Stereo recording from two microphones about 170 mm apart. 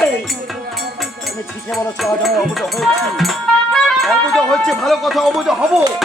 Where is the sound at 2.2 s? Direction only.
Centre (ahead or behind).